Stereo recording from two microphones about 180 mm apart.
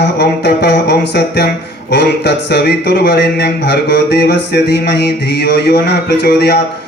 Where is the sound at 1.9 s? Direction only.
70° left (ahead or behind).